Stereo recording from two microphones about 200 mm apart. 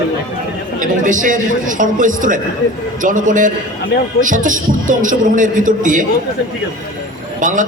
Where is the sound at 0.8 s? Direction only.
40° right (ahead or behind).